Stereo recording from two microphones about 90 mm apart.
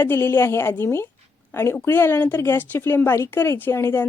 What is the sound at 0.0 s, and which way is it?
A woman's voice, 25° left (ahead or behind).